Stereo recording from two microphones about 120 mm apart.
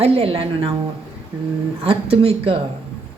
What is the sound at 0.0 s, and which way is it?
Speech, 55° right (ahead or behind).